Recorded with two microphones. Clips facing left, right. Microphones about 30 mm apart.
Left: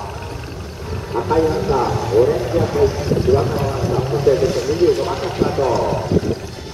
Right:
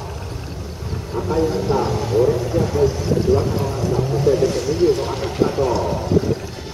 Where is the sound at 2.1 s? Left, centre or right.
Centre.